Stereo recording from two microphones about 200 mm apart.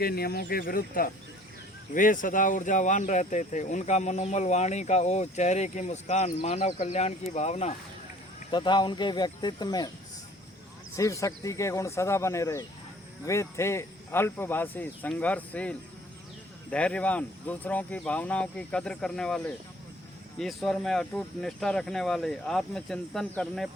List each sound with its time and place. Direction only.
0.0 s speech: 50° left (ahead or behind); by 7.7 s 35° left (ahead or behind)
8.4 s speech: 25° left (ahead or behind)
10.9 s speech: 15° left (ahead or behind)